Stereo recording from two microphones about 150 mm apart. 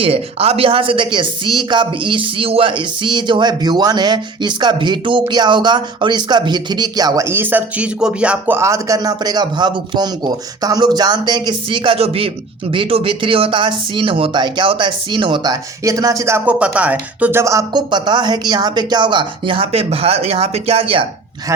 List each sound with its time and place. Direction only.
0.0 s speech: 40° right (ahead or behind); by 17.4 s 10° right (ahead or behind)
17.4 s speech: 20° right (ahead or behind); by 21.1 s 40° right (ahead or behind)